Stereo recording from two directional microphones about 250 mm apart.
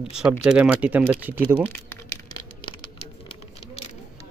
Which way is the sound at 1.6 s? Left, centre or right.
Centre.